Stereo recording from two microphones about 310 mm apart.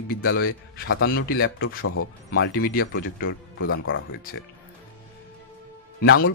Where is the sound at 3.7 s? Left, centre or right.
Left.